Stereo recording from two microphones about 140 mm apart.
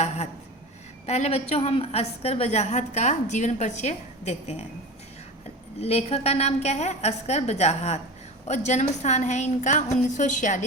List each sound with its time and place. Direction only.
1.0 s a woman's voice: 50° left (ahead or behind)
5.8 s a woman's voice: 50° left (ahead or behind)